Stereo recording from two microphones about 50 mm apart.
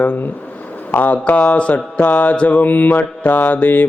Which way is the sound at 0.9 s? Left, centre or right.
Left.